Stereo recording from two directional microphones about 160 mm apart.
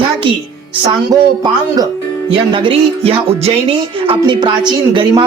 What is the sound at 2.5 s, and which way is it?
Speech, 35° right (ahead or behind).